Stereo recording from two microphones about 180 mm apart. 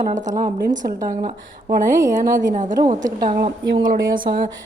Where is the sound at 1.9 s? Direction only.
15° right (ahead or behind).